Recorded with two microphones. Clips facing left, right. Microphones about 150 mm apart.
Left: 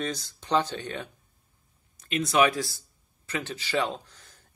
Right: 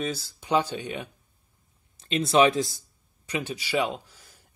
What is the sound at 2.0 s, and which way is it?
Speech, 25° right (ahead or behind).